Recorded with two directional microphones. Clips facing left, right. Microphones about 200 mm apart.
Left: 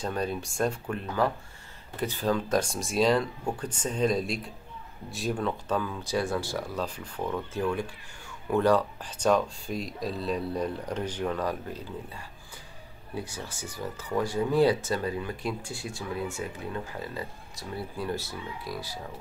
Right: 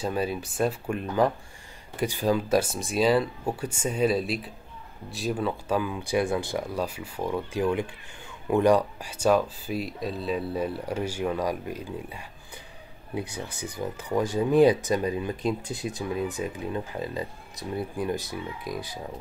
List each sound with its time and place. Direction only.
0.0 s speech: 5° right (ahead or behind)
13.7 s speech: 15° right (ahead or behind)